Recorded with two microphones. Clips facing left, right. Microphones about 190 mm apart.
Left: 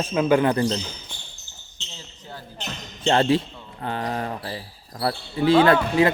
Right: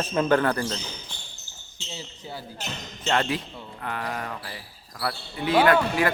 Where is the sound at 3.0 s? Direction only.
30° left (ahead or behind).